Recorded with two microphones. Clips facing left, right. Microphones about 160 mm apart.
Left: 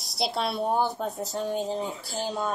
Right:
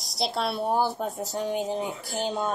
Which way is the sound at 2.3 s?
Centre (ahead or behind).